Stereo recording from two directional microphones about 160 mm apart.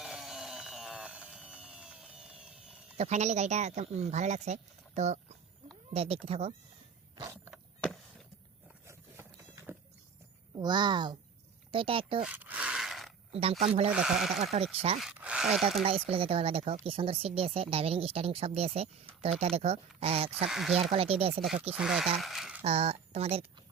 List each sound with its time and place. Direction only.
0.0 s a sound: centre (ahead or behind)
3.0 s speech: 45° right (ahead or behind)
10.5 s speech: 30° right (ahead or behind)
12.2 s a sound: 10° right (ahead or behind)
13.3 s speech: 40° right (ahead or behind)
13.9 s speech: 5° right (ahead or behind)
14.3 s speech: 45° right (ahead or behind)
14.9 s speech: 5° right (ahead or behind)
15.8 s speech: 40° right (ahead or behind)
20.5 s speech: centre (ahead or behind)
20.9 s speech: 35° right (ahead or behind)
21.7 s speech: 5° right (ahead or behind)
22.6 s speech: 40° right (ahead or behind)